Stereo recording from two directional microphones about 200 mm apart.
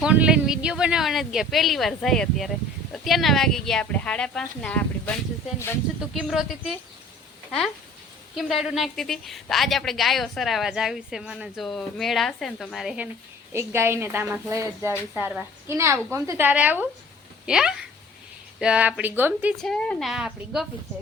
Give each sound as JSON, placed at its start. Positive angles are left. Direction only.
{"t": 0.0, "sound": "a woman's voice", "side_deg": -5}
{"t": 6.1, "sound": "a woman's voice", "side_deg": 0}
{"t": 8.4, "sound": "a woman's voice", "side_deg": 0}
{"t": 13.5, "sound": "speech", "side_deg": -10}
{"t": 19.6, "sound": "a woman's voice", "side_deg": 5}